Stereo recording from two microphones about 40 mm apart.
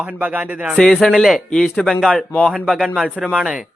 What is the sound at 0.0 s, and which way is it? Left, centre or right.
Music, right.